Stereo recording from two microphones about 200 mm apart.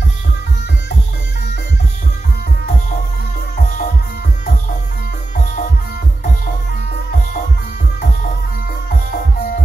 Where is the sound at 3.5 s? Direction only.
45° left (ahead or behind).